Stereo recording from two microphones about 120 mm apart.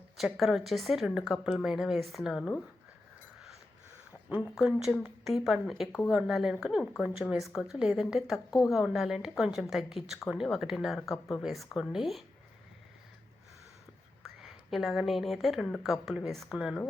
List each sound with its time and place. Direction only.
0.3 s speech: centre (ahead or behind)
4.3 s speech: 10° right (ahead or behind)
14.4 s speech: centre (ahead or behind)